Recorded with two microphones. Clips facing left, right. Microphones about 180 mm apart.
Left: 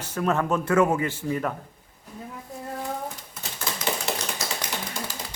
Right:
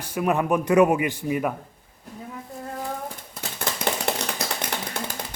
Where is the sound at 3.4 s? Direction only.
35° right (ahead or behind).